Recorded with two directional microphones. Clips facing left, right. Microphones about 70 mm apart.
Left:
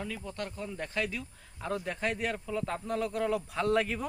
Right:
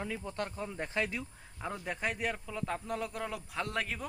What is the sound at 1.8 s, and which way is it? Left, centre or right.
Speech, centre.